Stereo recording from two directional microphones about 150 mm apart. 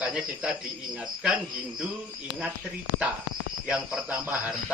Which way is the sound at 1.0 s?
5° right (ahead or behind).